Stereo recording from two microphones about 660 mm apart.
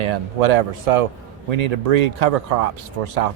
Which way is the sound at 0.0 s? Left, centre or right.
Right.